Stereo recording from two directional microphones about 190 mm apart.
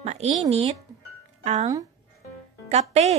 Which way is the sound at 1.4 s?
40° right (ahead or behind).